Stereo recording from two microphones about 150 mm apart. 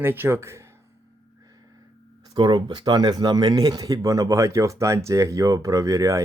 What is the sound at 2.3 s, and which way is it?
Speech, 30° right (ahead or behind).